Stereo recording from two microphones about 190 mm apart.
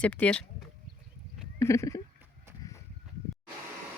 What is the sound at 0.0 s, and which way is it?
Speech, 5° left (ahead or behind).